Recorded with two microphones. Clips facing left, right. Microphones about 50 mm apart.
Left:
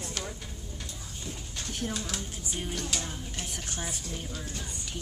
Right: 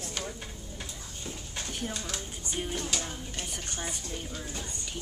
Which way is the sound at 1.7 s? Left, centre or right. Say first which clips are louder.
Left 3 dB; centre.